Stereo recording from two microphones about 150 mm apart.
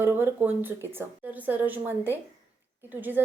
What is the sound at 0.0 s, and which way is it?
A woman's voice, 15° right (ahead or behind).